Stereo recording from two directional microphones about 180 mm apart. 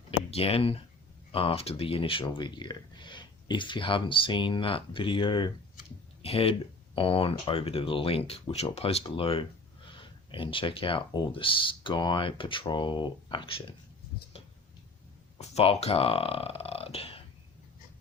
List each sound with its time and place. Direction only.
0.3 s speech: 35° left (ahead or behind)
14.3 s tick-tock: 35° left (ahead or behind)
15.4 s speech: 35° left (ahead or behind)